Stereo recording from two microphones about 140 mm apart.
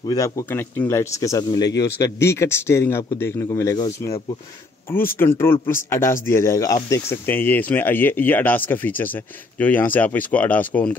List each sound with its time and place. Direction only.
0.0 s speech: 25° left (ahead or behind)
5.2 s speech: 15° left (ahead or behind)